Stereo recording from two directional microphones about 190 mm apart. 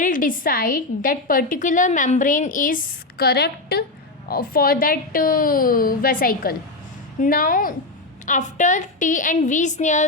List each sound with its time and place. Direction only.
0.0 s a woman's voice: 45° left (ahead or behind)